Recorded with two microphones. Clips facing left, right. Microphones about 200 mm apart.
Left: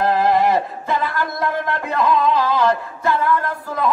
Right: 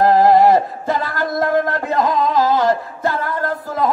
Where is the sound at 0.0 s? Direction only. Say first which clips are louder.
Right 5 dB; 40° right (ahead or behind).